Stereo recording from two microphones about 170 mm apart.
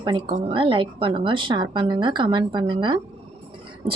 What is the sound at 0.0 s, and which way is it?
A woman's voice, 25° right (ahead or behind).